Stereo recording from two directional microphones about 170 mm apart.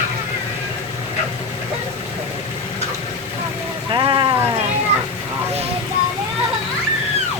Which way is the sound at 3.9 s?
30° right (ahead or behind).